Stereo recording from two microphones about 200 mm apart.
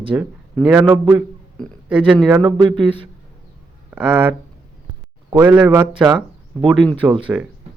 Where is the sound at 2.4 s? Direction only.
20° right (ahead or behind).